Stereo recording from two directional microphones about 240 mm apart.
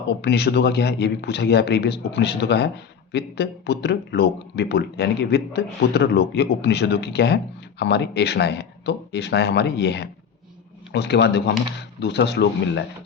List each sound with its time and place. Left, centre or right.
0.2 s a man's voice: left